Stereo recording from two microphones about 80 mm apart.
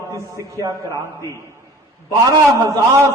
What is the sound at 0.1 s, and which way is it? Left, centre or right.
A man's voice, right.